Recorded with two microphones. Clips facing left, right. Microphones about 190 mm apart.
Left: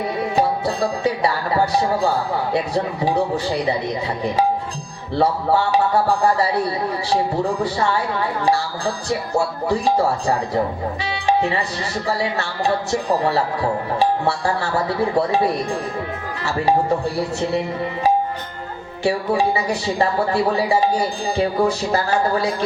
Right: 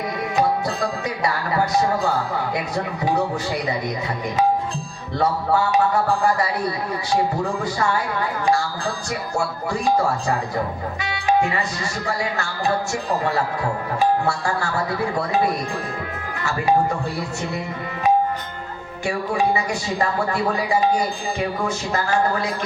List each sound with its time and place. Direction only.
0.3 s music: 30° left (ahead or behind)
2.5 s speech: 30° left (ahead or behind)
5.1 s speech: 30° left (ahead or behind)
9.8 s speech: 30° left (ahead or behind)
11.0 s music: 30° left (ahead or behind)
12.0 s speech: 30° left (ahead or behind)
16.4 s speech: 35° left (ahead or behind)
19.0 s speech: 30° left (ahead or behind)
21.3 s speech: 35° left (ahead or behind)